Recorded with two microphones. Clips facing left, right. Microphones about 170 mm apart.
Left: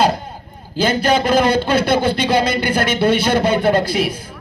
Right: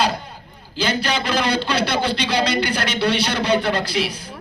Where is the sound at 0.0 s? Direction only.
50° left (ahead or behind).